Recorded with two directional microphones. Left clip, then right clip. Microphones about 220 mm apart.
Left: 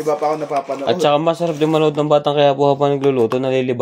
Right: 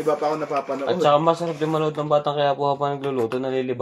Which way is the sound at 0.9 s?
55° left (ahead or behind).